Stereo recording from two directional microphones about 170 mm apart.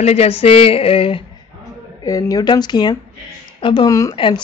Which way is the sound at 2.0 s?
20° left (ahead or behind).